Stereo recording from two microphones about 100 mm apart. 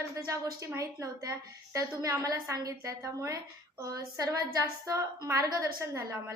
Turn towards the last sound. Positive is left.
turn(degrees=-30)  # may be behind; listen again after turning